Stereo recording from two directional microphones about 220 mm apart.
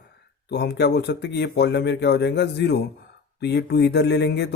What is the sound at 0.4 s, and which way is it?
Speech, 50° left (ahead or behind).